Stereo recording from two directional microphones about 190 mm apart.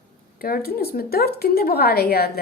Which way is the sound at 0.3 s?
50° left (ahead or behind).